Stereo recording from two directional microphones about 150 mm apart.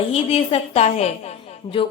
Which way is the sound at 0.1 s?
40° left (ahead or behind).